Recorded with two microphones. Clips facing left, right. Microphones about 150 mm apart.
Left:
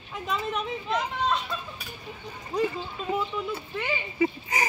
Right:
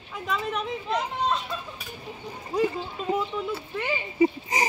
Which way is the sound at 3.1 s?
5° right (ahead or behind).